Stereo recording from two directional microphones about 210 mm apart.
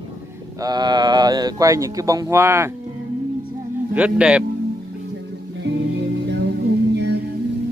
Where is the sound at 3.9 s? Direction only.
5° right (ahead or behind).